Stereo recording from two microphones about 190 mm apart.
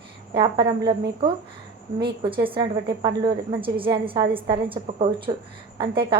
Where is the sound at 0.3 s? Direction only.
25° right (ahead or behind).